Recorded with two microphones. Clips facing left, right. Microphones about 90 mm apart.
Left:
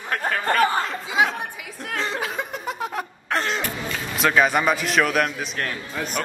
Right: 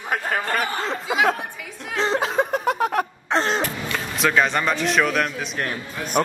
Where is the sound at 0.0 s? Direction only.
15° right (ahead or behind).